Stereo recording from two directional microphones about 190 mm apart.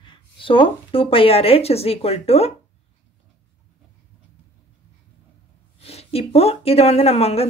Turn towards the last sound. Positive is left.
turn(degrees=30)  # may be behind; listen again after turning